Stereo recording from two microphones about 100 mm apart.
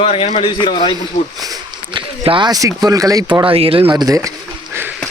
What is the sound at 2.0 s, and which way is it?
Speech, 50° right (ahead or behind).